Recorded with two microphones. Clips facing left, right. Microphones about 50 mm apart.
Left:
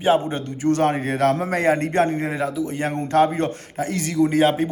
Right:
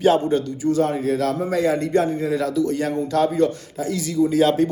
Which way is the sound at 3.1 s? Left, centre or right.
Left.